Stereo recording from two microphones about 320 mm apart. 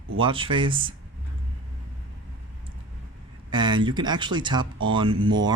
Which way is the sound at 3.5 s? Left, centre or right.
Centre.